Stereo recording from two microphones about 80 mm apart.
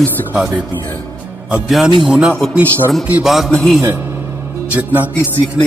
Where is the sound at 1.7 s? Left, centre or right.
Centre.